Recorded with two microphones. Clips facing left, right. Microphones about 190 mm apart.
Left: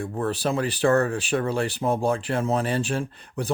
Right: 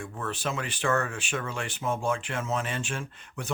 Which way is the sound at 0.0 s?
35° left (ahead or behind).